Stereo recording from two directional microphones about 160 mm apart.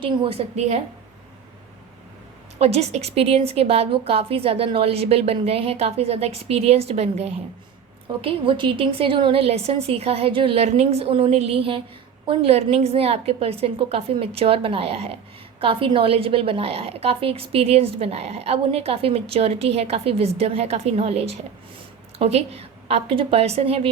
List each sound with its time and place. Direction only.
0.0 s a woman's voice: 35° right (ahead or behind)
2.6 s a woman's voice: 40° right (ahead or behind)